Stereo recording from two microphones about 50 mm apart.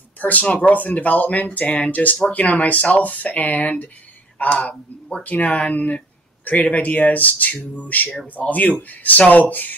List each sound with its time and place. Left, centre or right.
0.2 s speech: left